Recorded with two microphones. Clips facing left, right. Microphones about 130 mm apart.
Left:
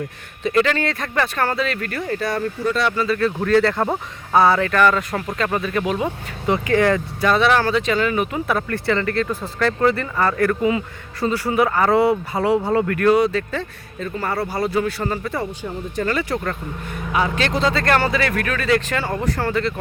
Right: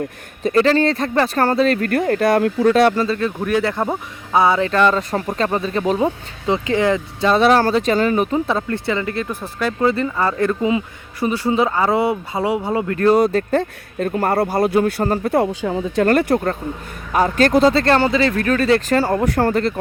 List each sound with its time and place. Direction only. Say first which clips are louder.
0.4 s speech: right 4 dB; 35° right (ahead or behind); by 2.9 s 60° right (ahead or behind)
2.9 s speech: right 2 dB; 35° right (ahead or behind)
3.2 s speech: left 2 dB; 15° right (ahead or behind); by 6.1 s 35° right (ahead or behind)
6.5 s speech: even; 20° right (ahead or behind)
7.3 s speech: right 4 dB; 35° right (ahead or behind); by 12.8 s 15° right (ahead or behind)
12.9 s speech: right 3 dB; 30° right (ahead or behind)
13.1 s speech: right 3 dB; 45° right (ahead or behind)
15.4 s speech: right 8 dB; 90° right
16.0 s speech: right 7 dB; 55° right (ahead or behind)
17.1 s speech: right 6 dB; 45° right (ahead or behind)
19.2 s speech: right 4 dB; 50° right (ahead or behind)